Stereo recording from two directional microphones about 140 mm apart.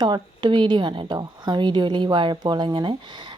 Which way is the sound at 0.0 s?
35° right (ahead or behind).